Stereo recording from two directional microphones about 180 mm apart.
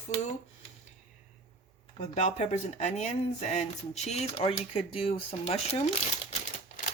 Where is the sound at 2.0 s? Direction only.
40° left (ahead or behind).